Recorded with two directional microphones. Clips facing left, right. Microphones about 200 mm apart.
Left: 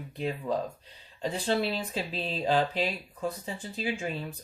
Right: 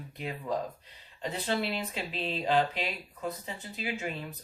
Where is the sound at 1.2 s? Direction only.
30° left (ahead or behind).